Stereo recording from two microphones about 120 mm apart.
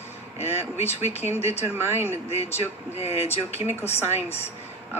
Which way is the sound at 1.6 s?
20° right (ahead or behind).